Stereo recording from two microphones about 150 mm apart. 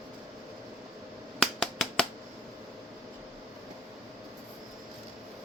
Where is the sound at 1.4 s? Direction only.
5° left (ahead or behind).